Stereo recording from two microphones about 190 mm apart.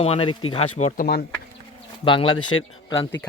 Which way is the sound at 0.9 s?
50° left (ahead or behind).